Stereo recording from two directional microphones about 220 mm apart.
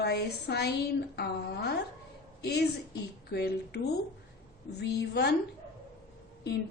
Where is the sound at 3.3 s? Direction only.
45° left (ahead or behind).